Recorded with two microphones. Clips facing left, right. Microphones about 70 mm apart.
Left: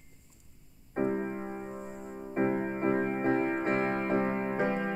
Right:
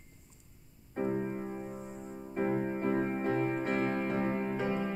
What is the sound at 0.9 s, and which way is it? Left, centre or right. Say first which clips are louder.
Music: left 2 dB; left.